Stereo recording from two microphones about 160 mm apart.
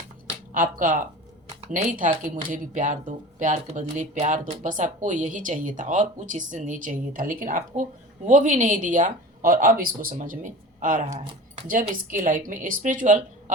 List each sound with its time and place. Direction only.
0.5 s speech: 55° right (ahead or behind)